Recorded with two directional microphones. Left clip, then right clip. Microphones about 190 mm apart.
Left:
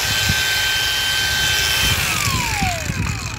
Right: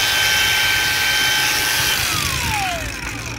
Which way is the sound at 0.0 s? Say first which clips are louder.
Right 3 dB; 15° left (ahead or behind).